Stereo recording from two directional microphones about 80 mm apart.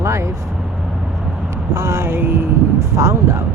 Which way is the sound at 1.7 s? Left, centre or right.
Right.